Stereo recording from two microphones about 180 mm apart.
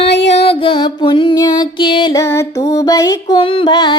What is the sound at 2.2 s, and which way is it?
Music, 15° left (ahead or behind).